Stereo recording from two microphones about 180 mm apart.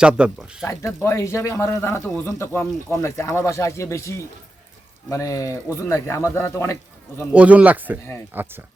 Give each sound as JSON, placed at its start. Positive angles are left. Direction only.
{"t": 0.0, "sound": "speech", "side_deg": -5}
{"t": 0.6, "sound": "speech", "side_deg": 15}
{"t": 7.3, "sound": "speech", "side_deg": -10}